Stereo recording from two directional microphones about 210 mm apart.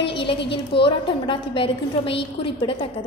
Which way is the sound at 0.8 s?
25° left (ahead or behind).